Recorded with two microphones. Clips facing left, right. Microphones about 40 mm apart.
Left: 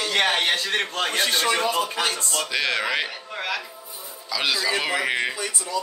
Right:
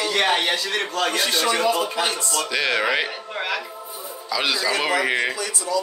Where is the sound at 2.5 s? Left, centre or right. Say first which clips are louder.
Right 3 dB; centre.